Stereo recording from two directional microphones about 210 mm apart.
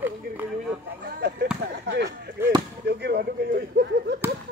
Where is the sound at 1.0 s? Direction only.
50° right (ahead or behind).